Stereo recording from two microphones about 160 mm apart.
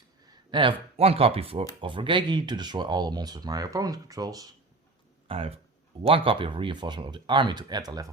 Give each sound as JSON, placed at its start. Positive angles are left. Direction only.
{"t": 0.3, "sound": "speech", "side_deg": -30}
{"t": 5.3, "sound": "speech", "side_deg": -35}